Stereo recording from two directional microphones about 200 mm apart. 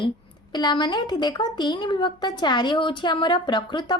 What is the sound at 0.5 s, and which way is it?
A woman's voice, 20° left (ahead or behind).